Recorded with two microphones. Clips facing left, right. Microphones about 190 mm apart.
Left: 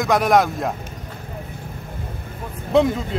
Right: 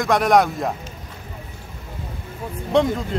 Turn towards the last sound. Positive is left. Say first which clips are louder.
# left 1 dB
turn(degrees=0)  # may be behind; listen again after turning